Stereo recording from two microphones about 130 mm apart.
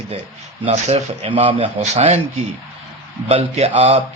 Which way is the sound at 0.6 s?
55° right (ahead or behind).